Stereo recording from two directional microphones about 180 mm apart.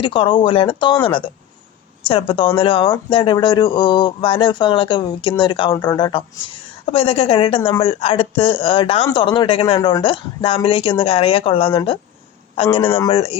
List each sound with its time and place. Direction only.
0.0 s a woman's voice: 30° left (ahead or behind)